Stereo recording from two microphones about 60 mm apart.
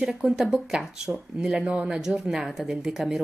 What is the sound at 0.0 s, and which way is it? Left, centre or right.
A woman's voice, centre.